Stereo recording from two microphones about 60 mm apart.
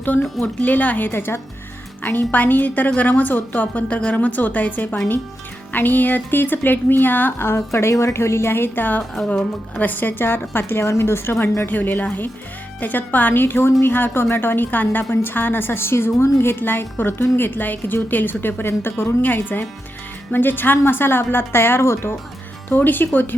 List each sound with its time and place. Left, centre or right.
0.0 s a woman's voice: left
7.7 s a woman's voice: left
9.1 s speech: centre
9.7 s a woman's voice: left
22.7 s a woman's voice: left